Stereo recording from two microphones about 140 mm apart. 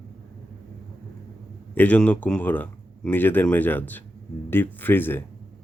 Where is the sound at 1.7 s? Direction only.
10° left (ahead or behind).